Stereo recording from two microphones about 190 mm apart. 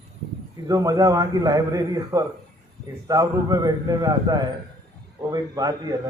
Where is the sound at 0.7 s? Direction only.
20° right (ahead or behind).